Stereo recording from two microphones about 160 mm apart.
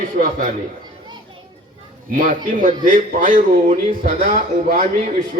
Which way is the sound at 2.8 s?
55° right (ahead or behind).